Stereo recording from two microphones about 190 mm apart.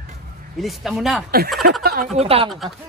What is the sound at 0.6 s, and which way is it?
Speech, centre (ahead or behind).